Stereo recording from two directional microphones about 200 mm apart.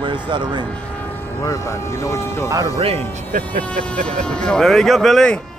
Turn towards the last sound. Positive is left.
turn(degrees=0)  # may be behind; listen again after turning